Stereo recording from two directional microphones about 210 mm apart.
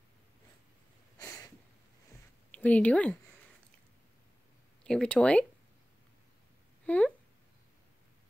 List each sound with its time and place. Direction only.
1.1 s a sound: 15° left (ahead or behind)
2.5 s speech: 5° left (ahead or behind)
4.8 s speech: 5° left (ahead or behind)
6.9 s speech: 5° left (ahead or behind)